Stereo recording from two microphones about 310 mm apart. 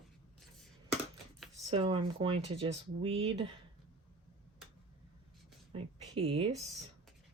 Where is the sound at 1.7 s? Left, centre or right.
Centre.